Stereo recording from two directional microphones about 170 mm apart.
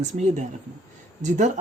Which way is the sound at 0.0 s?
45° right (ahead or behind).